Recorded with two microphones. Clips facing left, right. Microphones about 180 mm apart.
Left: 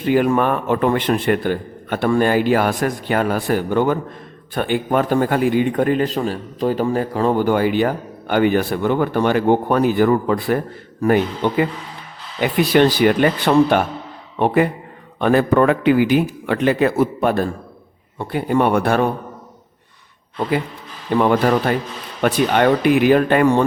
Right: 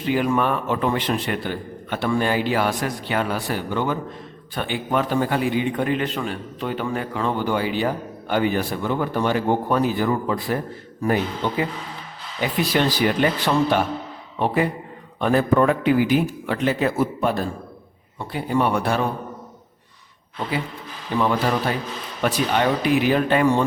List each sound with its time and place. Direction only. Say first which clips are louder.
0.0 s a man's voice: left 5 dB; 50° left (ahead or behind)
12.4 s a man's voice: left 7 dB; 65° left (ahead or behind)
21.2 s speech: left 5 dB; 55° left (ahead or behind)